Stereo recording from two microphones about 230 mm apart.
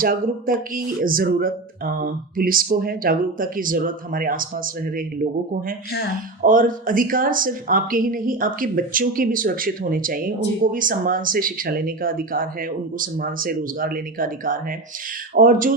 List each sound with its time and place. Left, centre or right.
0.0 s speech: right